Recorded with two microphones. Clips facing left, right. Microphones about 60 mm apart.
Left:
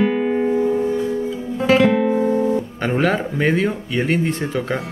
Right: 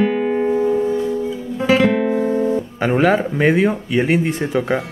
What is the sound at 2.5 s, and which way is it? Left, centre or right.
Speech, centre.